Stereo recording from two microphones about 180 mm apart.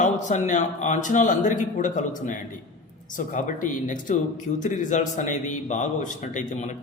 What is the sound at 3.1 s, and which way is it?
A man's voice, 45° left (ahead or behind).